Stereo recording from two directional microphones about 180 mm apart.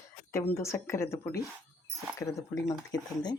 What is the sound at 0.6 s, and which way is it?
A woman's voice, 15° left (ahead or behind).